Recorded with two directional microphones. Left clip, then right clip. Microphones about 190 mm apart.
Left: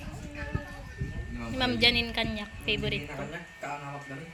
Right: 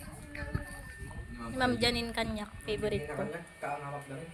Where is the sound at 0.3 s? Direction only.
Centre (ahead or behind).